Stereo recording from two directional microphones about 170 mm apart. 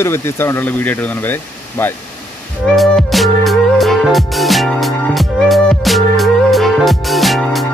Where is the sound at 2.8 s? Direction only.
Centre (ahead or behind).